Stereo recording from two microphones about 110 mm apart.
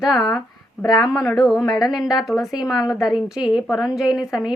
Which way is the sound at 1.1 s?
30° left (ahead or behind).